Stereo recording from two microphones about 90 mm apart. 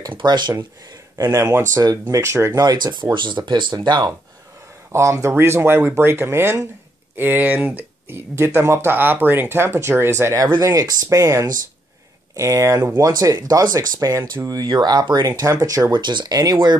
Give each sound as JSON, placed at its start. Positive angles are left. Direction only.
{"t": 0.1, "sound": "speech", "side_deg": -55}
{"t": 1.1, "sound": "speech", "side_deg": -30}
{"t": 2.5, "sound": "speech", "side_deg": -50}
{"t": 4.9, "sound": "speech", "side_deg": -35}